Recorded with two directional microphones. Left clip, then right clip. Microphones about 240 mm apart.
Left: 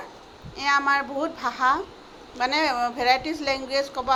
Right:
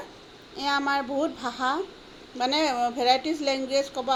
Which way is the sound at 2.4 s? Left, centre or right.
Centre.